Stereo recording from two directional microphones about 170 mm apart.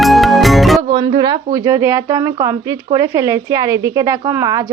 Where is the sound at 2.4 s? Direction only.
20° right (ahead or behind).